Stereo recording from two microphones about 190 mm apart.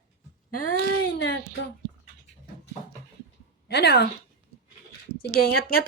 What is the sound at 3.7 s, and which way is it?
Speech, 60° left (ahead or behind).